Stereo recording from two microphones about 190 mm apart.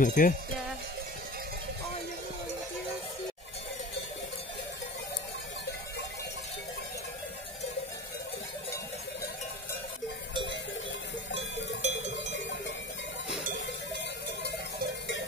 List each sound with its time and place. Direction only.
0.0 s speech: 45° left (ahead or behind)
11.8 s cowbell: 40° right (ahead or behind)